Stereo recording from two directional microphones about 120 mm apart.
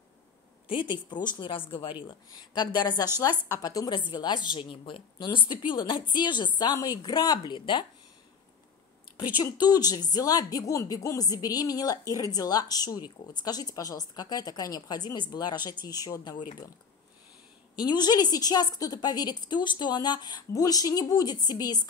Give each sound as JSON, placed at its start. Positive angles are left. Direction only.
{"t": 0.7, "sound": "a woman's voice", "side_deg": 40}
{"t": 2.3, "sound": "a woman's voice", "side_deg": 35}
{"t": 9.4, "sound": "a woman's voice", "side_deg": 35}
{"t": 17.8, "sound": "a woman's voice", "side_deg": 35}